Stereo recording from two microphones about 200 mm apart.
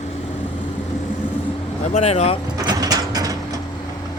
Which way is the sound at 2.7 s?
20° right (ahead or behind).